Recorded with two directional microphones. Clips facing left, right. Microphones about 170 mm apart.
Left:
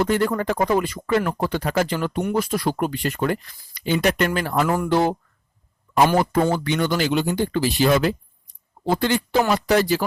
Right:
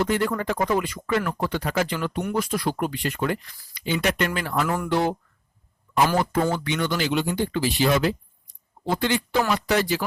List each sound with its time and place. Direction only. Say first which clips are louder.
0.0 s speech: left 3 dB; 45° left (ahead or behind)
6.5 s speech: left 4 dB; 35° left (ahead or behind)